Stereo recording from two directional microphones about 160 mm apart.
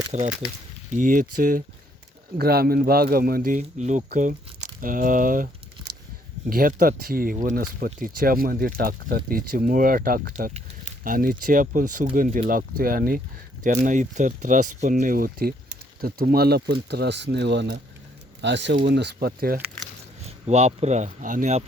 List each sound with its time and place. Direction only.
0.1 s speech: 50° right (ahead or behind)
2.4 s a man's voice: 75° right (ahead or behind)
3.6 s speech: 45° right (ahead or behind)
6.5 s speech: 60° right (ahead or behind)
13.8 s speech: 50° right (ahead or behind); by 19.5 s 70° right (ahead or behind)
20.2 s speech: 40° right (ahead or behind)